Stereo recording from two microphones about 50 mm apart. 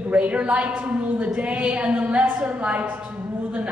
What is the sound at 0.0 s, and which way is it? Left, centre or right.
A woman's voice, right.